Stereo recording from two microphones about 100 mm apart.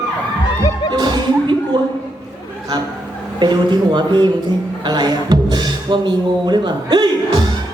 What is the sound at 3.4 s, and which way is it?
Speech, 50° right (ahead or behind).